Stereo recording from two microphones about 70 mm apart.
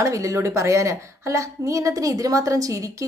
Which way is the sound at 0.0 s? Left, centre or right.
Right.